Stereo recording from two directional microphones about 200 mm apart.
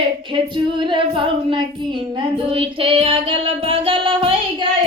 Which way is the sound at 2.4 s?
25° right (ahead or behind).